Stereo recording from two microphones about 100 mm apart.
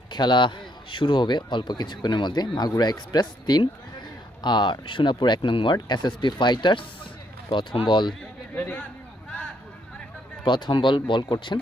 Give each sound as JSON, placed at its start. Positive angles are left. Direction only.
{"t": 0.1, "sound": "speech", "side_deg": 50}
{"t": 8.5, "sound": "a man's voice", "side_deg": 15}
{"t": 10.4, "sound": "speech", "side_deg": 55}